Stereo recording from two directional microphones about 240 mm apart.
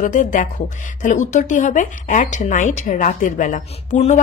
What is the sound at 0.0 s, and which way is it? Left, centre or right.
A woman's voice, left.